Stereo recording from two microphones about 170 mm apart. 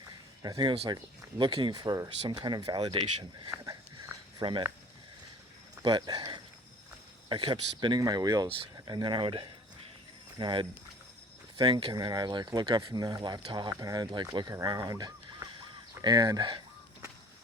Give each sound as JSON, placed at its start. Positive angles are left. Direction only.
{"t": 0.4, "sound": "speech", "side_deg": -25}
{"t": 5.8, "sound": "speech", "side_deg": -25}